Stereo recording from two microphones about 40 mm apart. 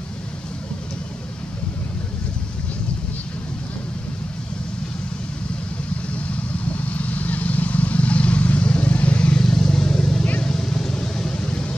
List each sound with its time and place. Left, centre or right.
6.1 s vehicle: left
9.4 s vehicle: centre
11.4 s vehicle: left